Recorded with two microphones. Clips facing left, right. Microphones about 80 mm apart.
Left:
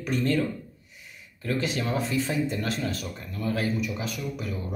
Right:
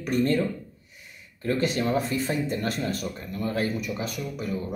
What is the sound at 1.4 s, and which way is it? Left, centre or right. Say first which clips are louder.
Speech: right 3 dB; right.